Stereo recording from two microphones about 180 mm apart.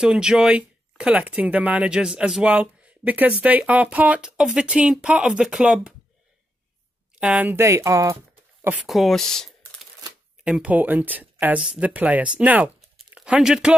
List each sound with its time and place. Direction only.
0.0 s speech: 5° right (ahead or behind)
7.2 s speech: 5° right (ahead or behind)
8.6 s speech: 5° right (ahead or behind)